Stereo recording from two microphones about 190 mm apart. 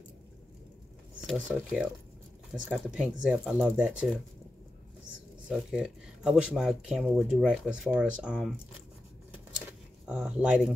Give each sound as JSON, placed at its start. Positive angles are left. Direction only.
{"t": 1.2, "sound": "speech", "side_deg": 0}
{"t": 5.5, "sound": "speech", "side_deg": -5}
{"t": 10.0, "sound": "speech", "side_deg": -5}